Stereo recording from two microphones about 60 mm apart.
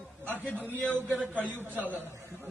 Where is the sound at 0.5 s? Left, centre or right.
Right.